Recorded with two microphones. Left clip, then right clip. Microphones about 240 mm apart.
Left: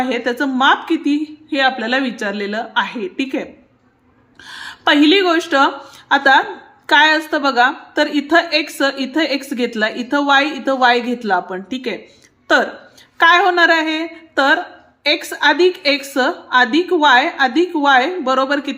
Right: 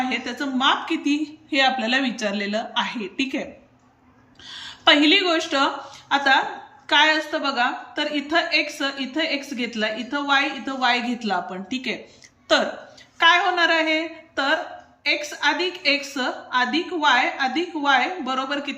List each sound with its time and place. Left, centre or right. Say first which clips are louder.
0.0 s a woman's voice: left 7 dB; left
4.4 s a woman's voice: left 2 dB; centre